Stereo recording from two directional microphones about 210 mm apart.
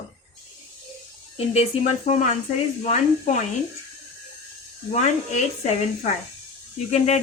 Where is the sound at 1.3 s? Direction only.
30° left (ahead or behind).